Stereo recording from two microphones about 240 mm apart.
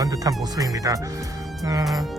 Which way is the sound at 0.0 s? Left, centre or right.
Centre.